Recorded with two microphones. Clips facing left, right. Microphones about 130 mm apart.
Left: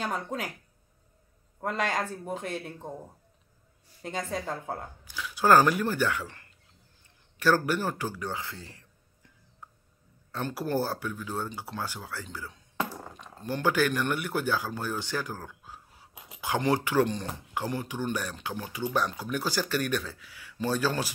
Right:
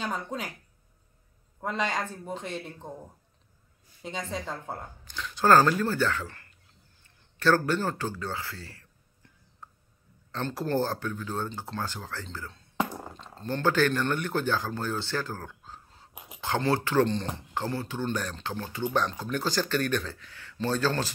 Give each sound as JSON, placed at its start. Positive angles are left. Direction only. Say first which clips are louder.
{"t": 0.0, "sound": "speech", "louder": "left 1 dB", "side_deg": 5}
{"t": 1.6, "sound": "speech", "louder": "left 1 dB", "side_deg": 5}
{"t": 4.3, "sound": "speech", "louder": "left 2 dB", "side_deg": 5}
{"t": 10.3, "sound": "speech", "louder": "right 1 dB", "side_deg": 10}
{"t": 12.7, "sound": "a sound", "louder": "right 3 dB", "side_deg": -15}
{"t": 13.2, "sound": "speech", "louder": "right 1 dB", "side_deg": 10}
{"t": 16.1, "sound": "a sound", "louder": "right 2 dB", "side_deg": -20}
{"t": 16.3, "sound": "speech", "louder": "even", "side_deg": 10}